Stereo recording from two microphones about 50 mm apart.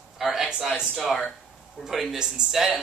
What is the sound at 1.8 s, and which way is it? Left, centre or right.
Speech, centre.